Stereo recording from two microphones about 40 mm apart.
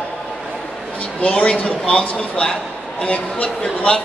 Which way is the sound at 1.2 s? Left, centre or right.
Left.